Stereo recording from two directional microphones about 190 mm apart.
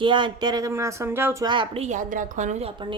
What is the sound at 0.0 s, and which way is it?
A woman's voice, 25° right (ahead or behind).